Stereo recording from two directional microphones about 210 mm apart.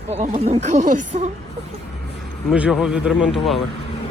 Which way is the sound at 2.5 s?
5° right (ahead or behind).